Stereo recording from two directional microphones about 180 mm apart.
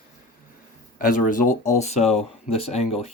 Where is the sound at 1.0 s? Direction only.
50° left (ahead or behind).